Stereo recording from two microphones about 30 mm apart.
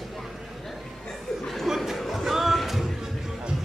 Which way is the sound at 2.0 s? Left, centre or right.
Centre.